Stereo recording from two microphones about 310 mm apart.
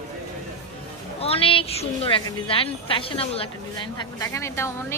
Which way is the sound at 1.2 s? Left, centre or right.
Centre.